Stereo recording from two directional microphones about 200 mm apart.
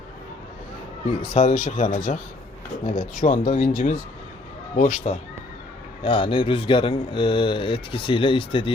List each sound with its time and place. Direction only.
1.3 s speech: 35° left (ahead or behind)
6.0 s speech: 25° left (ahead or behind)